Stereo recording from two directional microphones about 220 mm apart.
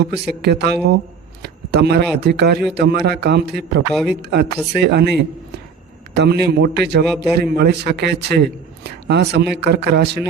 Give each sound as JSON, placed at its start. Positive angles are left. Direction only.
{"t": 0.0, "sound": "a man's voice", "side_deg": -50}
{"t": 1.4, "sound": "a sound", "side_deg": -50}
{"t": 2.2, "sound": "a man's voice", "side_deg": -50}